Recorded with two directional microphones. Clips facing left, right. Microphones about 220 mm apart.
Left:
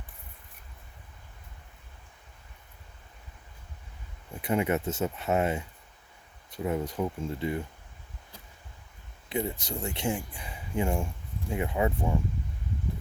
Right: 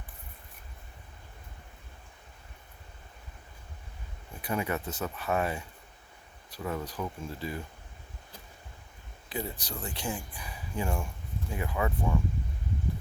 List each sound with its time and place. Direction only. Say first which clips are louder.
4.4 s speech: left 5 dB; 25° left (ahead or behind)
9.3 s speech: left 5 dB; 25° left (ahead or behind)